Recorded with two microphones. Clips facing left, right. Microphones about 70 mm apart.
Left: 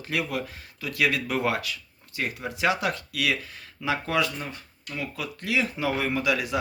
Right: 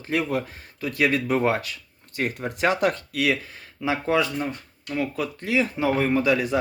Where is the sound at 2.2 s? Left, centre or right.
Right.